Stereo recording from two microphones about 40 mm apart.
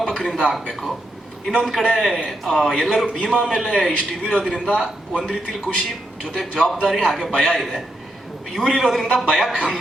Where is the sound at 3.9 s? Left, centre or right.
Left.